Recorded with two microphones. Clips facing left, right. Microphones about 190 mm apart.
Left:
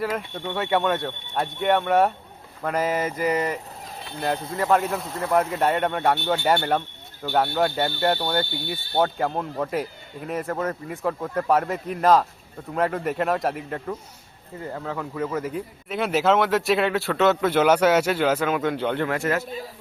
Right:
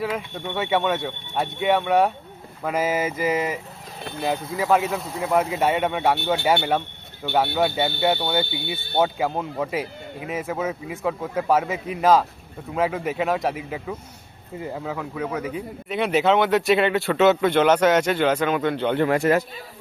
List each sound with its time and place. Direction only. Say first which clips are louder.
0.0 s speech: even; centre (ahead or behind)
8.4 s speech: right 1 dB; 60° right (ahead or behind)
8.7 s speech: right 1 dB; 5° right (ahead or behind)
18.9 s speech: right 5 dB; 15° right (ahead or behind)